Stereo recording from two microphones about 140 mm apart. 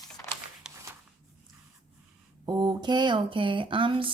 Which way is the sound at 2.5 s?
30° right (ahead or behind).